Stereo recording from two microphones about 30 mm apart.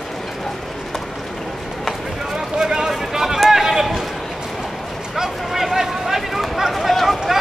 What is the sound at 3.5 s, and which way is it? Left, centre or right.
Run, centre.